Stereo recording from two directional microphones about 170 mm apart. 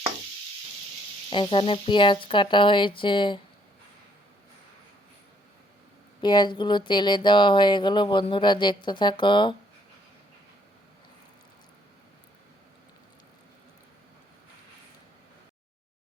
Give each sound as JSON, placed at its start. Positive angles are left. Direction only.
{"t": 1.3, "sound": "speech", "side_deg": 30}
{"t": 6.2, "sound": "speech", "side_deg": 25}